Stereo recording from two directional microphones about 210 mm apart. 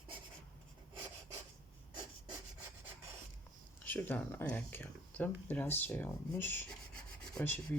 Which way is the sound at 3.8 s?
10° left (ahead or behind).